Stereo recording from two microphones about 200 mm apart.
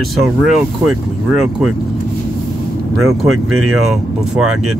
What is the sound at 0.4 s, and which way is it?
Speech, centre (ahead or behind).